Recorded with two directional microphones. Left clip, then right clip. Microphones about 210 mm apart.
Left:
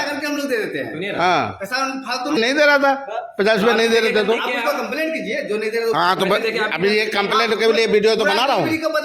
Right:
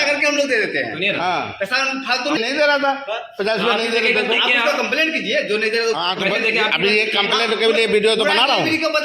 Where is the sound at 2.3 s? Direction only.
50° left (ahead or behind).